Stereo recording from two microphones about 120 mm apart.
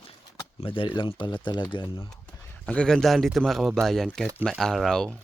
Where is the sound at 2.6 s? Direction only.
5° left (ahead or behind).